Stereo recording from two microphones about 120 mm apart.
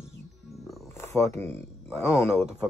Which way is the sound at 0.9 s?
25° left (ahead or behind).